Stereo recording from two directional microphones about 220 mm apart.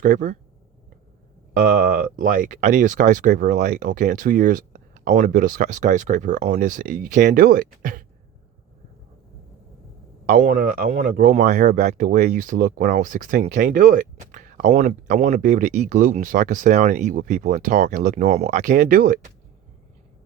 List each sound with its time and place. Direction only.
0.0 s speech: 35° right (ahead or behind)
1.5 s speech: 40° right (ahead or behind)
10.2 s speech: 35° right (ahead or behind)